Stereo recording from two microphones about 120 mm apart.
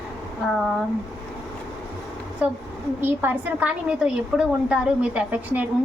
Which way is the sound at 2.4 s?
10° right (ahead or behind).